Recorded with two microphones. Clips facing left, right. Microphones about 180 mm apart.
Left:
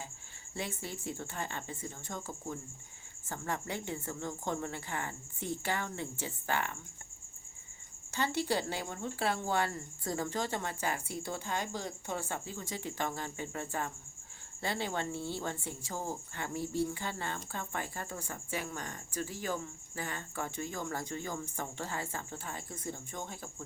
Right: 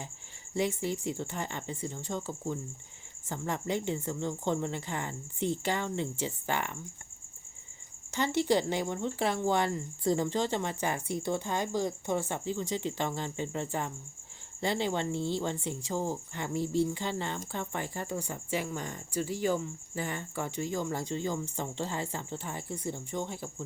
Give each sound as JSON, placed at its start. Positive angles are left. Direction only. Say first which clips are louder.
{"t": 0.5, "sound": "speech", "louder": "right 9 dB", "side_deg": -15}
{"t": 8.1, "sound": "speech", "louder": "right 5 dB", "side_deg": -20}